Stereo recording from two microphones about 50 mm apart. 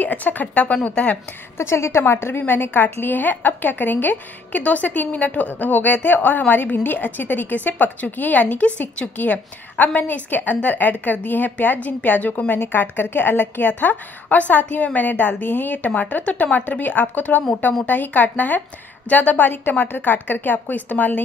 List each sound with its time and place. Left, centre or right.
0.0 s a woman's voice: left
1.6 s a woman's voice: left
12.6 s a woman's voice: left